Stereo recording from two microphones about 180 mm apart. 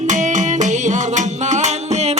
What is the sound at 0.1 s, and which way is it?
Music, 40° right (ahead or behind).